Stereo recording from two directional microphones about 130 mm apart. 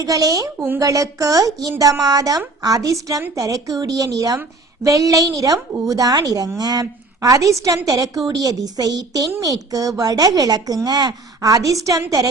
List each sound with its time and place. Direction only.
0.0 s a woman's voice: 25° right (ahead or behind)